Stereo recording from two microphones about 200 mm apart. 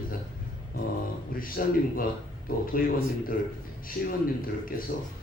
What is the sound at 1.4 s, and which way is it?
Speech, 45° left (ahead or behind).